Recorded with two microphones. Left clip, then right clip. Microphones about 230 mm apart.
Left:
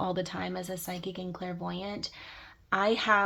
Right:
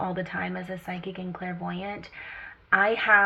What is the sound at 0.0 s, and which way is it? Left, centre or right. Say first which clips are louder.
Speech: right 2 dB; left.